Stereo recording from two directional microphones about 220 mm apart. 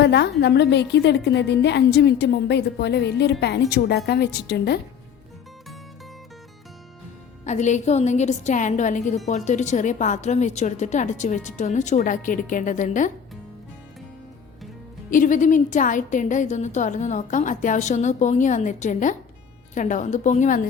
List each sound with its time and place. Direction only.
0.0 s a woman's voice: 50° left (ahead or behind)
7.4 s a woman's voice: 35° left (ahead or behind)
15.1 s a woman's voice: 35° left (ahead or behind)